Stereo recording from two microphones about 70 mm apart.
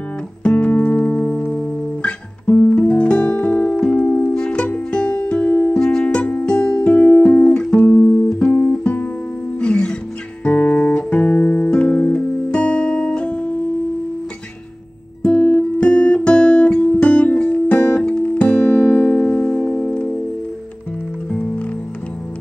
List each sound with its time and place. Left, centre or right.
0.4 s music: centre
6.8 s music: left
15.2 s guitar: centre
21.3 s music: centre